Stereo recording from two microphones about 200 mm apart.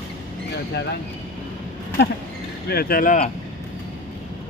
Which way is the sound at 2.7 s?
50° left (ahead or behind).